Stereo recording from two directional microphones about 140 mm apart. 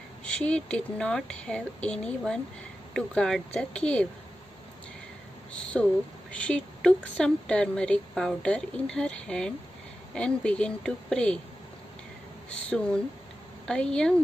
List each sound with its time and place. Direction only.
0.2 s speech: 10° left (ahead or behind)
5.5 s speech: 5° left (ahead or behind)
12.6 s speech: 5° left (ahead or behind)